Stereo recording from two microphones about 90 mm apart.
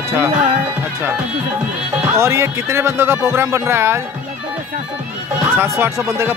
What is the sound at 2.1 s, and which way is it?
Speech, 30° right (ahead or behind).